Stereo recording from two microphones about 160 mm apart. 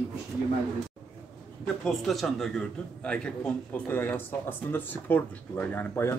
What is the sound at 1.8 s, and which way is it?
A man's voice, centre (ahead or behind).